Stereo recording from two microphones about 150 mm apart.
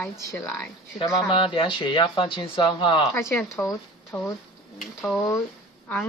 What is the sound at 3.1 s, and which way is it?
Speech, 20° left (ahead or behind).